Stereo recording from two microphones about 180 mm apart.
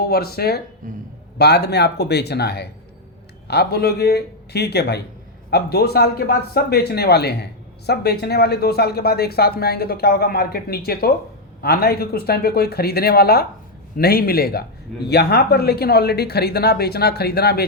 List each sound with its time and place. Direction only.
0.1 s speech: 60° left (ahead or behind)
0.8 s a man's voice: 45° right (ahead or behind)
1.4 s speech: 65° left (ahead or behind)